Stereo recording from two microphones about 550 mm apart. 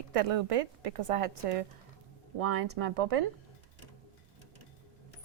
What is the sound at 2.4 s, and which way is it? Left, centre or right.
Speech, right.